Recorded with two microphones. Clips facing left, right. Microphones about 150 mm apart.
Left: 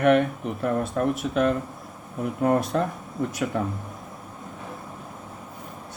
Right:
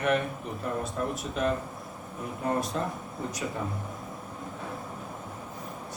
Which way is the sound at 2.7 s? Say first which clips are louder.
Left 7 dB; 60° left (ahead or behind).